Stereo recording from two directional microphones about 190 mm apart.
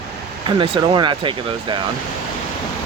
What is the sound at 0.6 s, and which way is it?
Speech, 25° right (ahead or behind).